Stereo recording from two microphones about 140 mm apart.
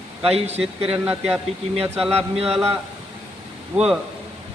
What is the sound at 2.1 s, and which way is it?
Speech, 45° right (ahead or behind).